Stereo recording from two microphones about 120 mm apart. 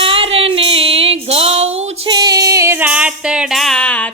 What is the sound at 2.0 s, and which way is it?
Music, 40° right (ahead or behind).